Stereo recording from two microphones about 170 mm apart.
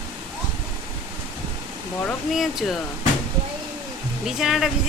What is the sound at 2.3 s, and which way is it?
Speech, centre (ahead or behind).